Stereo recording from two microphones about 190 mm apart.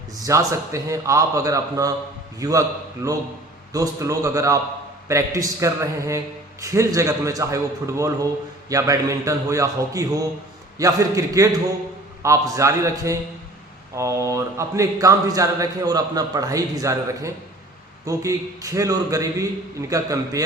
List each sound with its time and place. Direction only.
0.3 s speech: 15° right (ahead or behind)